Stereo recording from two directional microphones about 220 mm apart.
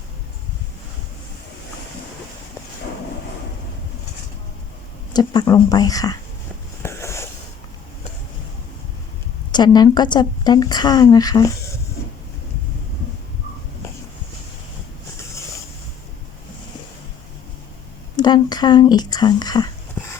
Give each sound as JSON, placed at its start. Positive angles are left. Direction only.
{"t": 5.1, "sound": "speech", "side_deg": 20}
{"t": 6.8, "sound": "a sound", "side_deg": 10}
{"t": 9.5, "sound": "a woman's voice", "side_deg": 20}
{"t": 18.2, "sound": "speech", "side_deg": 20}